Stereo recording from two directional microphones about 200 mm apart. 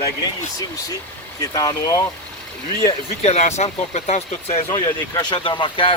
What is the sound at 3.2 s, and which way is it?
Speech, 35° left (ahead or behind).